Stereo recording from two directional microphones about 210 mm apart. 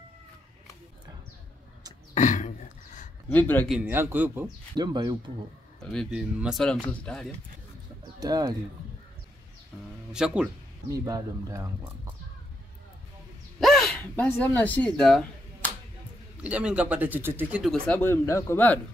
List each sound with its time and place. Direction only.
2.1 s a sound: 35° left (ahead or behind)
3.3 s speech: 10° left (ahead or behind)
3.7 s a man's voice: 10° right (ahead or behind)
4.7 s speech: 20° right (ahead or behind)
5.9 s speech: centre (ahead or behind)
8.2 s a man's voice: 20° right (ahead or behind)
10.1 s speech: 5° right (ahead or behind)
11.1 s a man's voice: 15° right (ahead or behind)
13.6 s a sound: centre (ahead or behind)
16.4 s speech: 5° right (ahead or behind); by 18.8 s 10° left (ahead or behind)